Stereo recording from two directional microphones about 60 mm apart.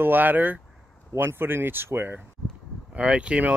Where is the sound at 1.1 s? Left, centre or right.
Right.